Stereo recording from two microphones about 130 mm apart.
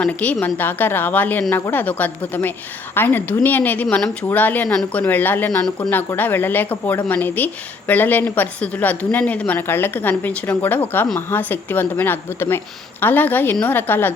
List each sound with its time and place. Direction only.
0.0 s speech: 10° left (ahead or behind)
5.5 s speech: 5° left (ahead or behind)
5.9 s speech: 15° left (ahead or behind)